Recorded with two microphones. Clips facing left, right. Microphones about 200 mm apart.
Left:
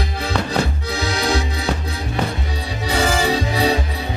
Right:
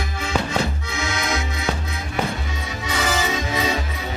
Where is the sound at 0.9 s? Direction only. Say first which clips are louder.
Left 5 dB; 35° left (ahead or behind).